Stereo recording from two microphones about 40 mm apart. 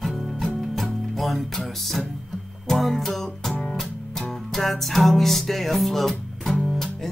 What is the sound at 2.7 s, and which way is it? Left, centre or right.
Music, centre.